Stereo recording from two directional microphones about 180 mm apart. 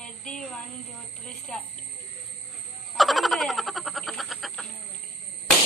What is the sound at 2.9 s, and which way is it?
Frog, centre (ahead or behind).